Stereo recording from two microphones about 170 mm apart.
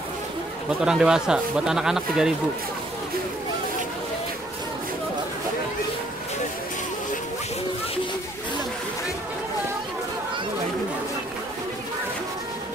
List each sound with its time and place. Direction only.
0.7 s speech: 5° right (ahead or behind)